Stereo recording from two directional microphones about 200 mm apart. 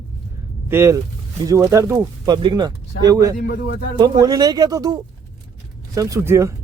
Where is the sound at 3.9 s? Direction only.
20° right (ahead or behind).